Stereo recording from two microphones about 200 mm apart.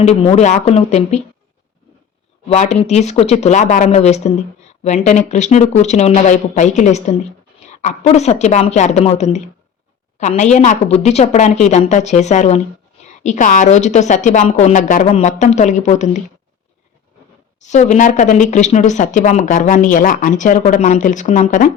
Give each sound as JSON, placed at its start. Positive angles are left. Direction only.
{"t": 0.0, "sound": "speech", "side_deg": 30}
{"t": 2.5, "sound": "speech", "side_deg": 35}
{"t": 17.6, "sound": "speech", "side_deg": 35}